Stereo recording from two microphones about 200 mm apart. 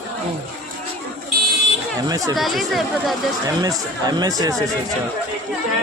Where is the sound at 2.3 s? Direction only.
Centre (ahead or behind).